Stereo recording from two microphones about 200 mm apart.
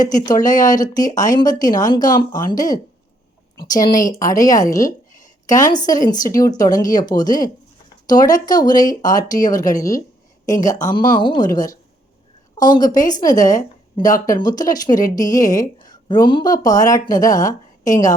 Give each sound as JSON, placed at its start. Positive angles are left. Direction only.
{"t": 0.3, "sound": "a woman's voice", "side_deg": 20}
{"t": 5.1, "sound": "a sound", "side_deg": 15}
{"t": 5.7, "sound": "a woman's voice", "side_deg": 20}